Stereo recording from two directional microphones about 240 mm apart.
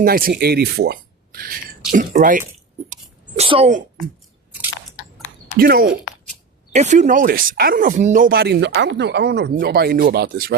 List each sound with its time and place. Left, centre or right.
0.0 s speech: right
2.9 s a sound: right
5.5 s speech: right